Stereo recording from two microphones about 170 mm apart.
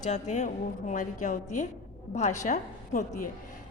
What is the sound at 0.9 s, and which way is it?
A woman's voice, 50° left (ahead or behind).